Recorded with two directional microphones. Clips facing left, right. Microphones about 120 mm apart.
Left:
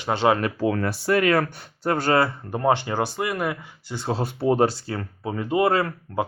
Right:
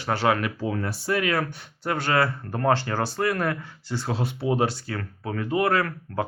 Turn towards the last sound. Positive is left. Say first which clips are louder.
# left 2 dB
turn(degrees=25)  # may be behind; listen again after turning